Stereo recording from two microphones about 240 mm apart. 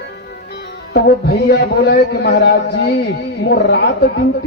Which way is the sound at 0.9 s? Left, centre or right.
Left.